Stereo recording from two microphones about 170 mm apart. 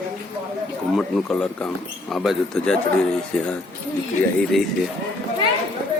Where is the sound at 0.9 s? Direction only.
Centre (ahead or behind).